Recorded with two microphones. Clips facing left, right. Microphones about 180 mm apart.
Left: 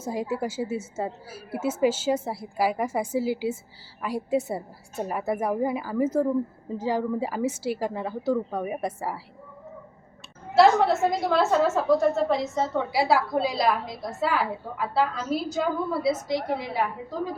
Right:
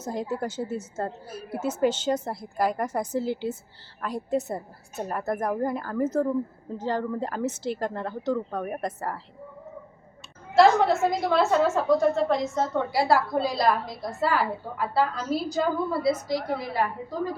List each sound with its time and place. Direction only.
0.0 s a woman's voice: 10° left (ahead or behind)
10.5 s a woman's voice: centre (ahead or behind)